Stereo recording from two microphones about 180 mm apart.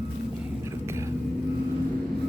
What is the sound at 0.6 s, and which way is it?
Whispering, 15° right (ahead or behind).